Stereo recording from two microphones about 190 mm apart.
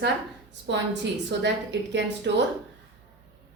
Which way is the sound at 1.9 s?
65° right (ahead or behind).